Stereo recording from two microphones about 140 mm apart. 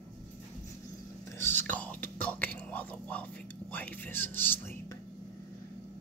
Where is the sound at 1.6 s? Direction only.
10° left (ahead or behind).